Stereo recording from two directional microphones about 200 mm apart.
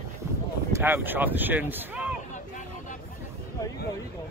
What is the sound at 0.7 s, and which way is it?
Speech, 10° right (ahead or behind).